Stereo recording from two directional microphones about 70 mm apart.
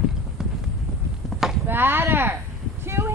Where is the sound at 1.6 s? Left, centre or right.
Right.